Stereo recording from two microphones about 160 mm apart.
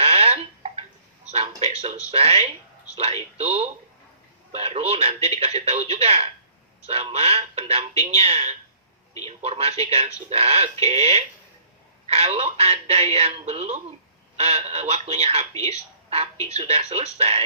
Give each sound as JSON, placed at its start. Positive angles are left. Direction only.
{"t": 0.0, "sound": "alarm clock", "side_deg": -40}
{"t": 1.3, "sound": "a sound", "side_deg": -40}
{"t": 2.0, "sound": "a woman's voice", "side_deg": -40}